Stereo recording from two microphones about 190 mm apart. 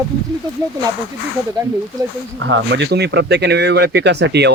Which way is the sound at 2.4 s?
75° right (ahead or behind).